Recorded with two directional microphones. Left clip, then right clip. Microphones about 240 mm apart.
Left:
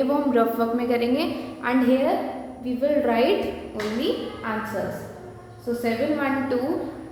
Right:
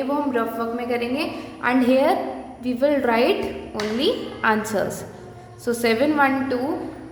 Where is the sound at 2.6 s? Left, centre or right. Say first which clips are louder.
Right 2 dB; right.